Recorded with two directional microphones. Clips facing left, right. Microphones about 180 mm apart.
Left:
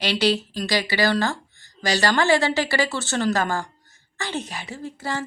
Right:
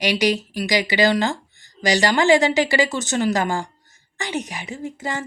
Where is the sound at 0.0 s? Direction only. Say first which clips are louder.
Right 2 dB; 15° right (ahead or behind).